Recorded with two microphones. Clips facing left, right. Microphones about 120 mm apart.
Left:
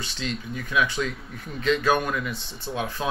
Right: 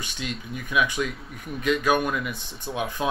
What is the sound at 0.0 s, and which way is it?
Speech, 15° right (ahead or behind).